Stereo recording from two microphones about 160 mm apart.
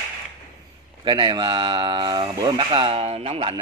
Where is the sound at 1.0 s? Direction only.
25° right (ahead or behind).